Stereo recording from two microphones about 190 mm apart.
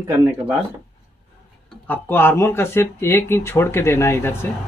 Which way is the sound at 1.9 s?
10° left (ahead or behind).